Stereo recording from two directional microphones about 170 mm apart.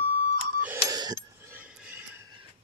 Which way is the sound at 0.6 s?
15° right (ahead or behind).